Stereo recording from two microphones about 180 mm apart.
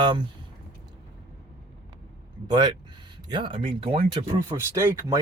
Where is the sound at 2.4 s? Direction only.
25° right (ahead or behind).